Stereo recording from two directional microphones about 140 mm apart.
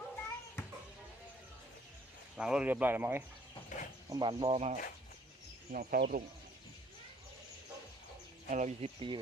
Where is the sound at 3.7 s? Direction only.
65° left (ahead or behind).